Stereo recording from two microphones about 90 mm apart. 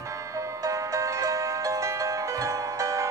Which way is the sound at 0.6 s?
35° right (ahead or behind).